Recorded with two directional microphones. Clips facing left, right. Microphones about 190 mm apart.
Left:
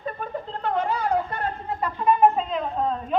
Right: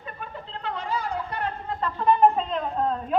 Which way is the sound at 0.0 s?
45° left (ahead or behind).